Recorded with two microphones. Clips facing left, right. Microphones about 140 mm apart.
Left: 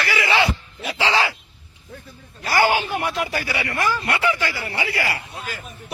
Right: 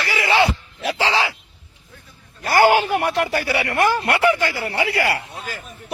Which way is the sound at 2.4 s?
50° right (ahead or behind).